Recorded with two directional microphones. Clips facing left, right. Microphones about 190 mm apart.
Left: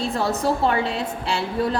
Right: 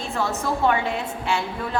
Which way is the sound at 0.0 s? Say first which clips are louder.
Left 4 dB; 35° left (ahead or behind).